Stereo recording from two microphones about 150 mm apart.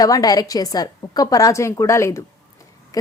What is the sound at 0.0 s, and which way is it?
A woman's voice, 25° left (ahead or behind).